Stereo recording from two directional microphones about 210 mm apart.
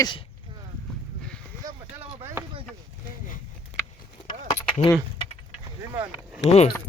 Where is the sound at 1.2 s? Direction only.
5° left (ahead or behind).